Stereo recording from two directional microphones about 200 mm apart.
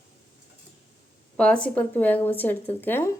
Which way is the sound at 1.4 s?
5° left (ahead or behind).